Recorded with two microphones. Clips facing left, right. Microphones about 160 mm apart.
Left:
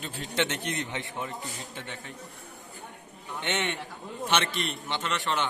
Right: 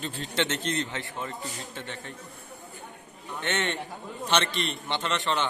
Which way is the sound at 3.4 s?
15° left (ahead or behind).